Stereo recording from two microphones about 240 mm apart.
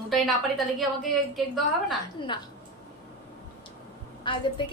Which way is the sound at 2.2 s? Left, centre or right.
Centre.